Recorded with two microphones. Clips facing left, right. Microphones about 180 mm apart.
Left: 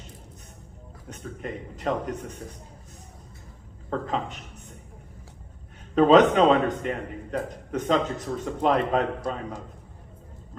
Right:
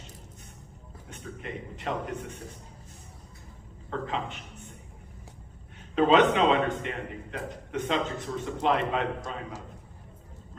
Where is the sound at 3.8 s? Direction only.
40° left (ahead or behind).